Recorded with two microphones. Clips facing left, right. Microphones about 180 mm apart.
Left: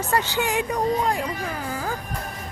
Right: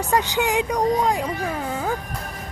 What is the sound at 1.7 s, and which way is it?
Music, 25° right (ahead or behind).